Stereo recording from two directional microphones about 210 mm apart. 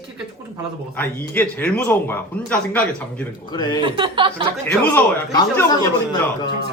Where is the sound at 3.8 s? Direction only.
25° right (ahead or behind).